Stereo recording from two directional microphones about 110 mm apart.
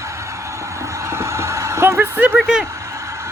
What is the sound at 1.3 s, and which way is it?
Vehicle, 25° right (ahead or behind).